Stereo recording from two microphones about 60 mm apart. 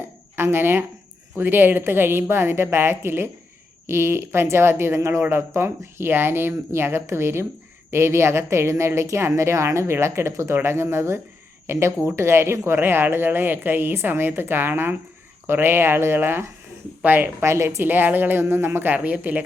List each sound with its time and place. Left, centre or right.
0.3 s a woman's voice: right
17.4 s speech: right
17.8 s a woman's voice: right